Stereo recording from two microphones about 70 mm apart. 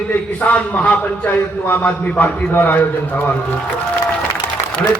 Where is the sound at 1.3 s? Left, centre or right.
Left.